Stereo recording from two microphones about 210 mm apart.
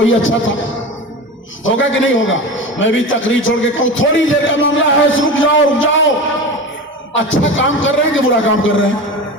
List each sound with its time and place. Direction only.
0.0 s a man's voice: 65° left (ahead or behind)
1.6 s a man's voice: 65° left (ahead or behind)
7.2 s a man's voice: 65° left (ahead or behind)